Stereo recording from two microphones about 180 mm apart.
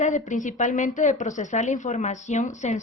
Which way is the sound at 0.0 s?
45° left (ahead or behind).